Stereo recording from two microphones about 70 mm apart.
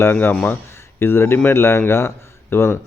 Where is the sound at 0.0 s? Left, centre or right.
Left.